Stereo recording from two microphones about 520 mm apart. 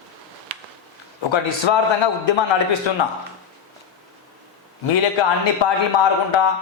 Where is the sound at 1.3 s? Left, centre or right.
Left.